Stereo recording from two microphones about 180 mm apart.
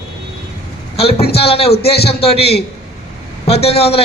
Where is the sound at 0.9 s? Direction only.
35° left (ahead or behind).